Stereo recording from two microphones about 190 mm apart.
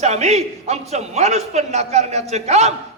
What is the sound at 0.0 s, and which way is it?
A man's voice, 35° right (ahead or behind).